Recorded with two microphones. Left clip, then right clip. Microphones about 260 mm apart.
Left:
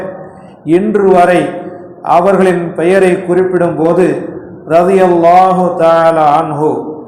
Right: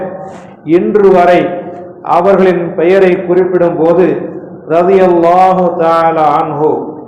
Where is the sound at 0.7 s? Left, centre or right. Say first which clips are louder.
Right 2 dB; left.